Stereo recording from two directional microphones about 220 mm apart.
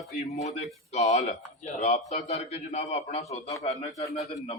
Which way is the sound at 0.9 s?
30° left (ahead or behind).